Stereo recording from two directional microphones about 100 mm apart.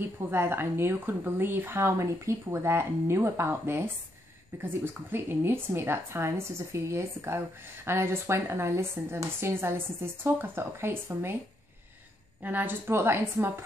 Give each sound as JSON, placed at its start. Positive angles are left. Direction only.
{"t": 0.0, "sound": "a woman's voice", "side_deg": -25}
{"t": 12.4, "sound": "a woman's voice", "side_deg": -20}